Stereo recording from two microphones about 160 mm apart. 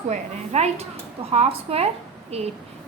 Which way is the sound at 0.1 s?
45° right (ahead or behind).